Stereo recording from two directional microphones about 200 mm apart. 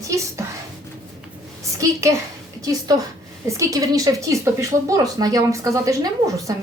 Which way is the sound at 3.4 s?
15° right (ahead or behind).